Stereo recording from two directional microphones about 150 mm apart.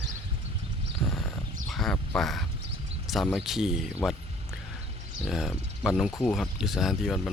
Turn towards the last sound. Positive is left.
turn(degrees=0)  # may be behind; listen again after turning